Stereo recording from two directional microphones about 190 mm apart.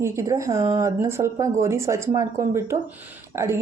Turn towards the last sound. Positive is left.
turn(degrees=-15)  # may be behind; listen again after turning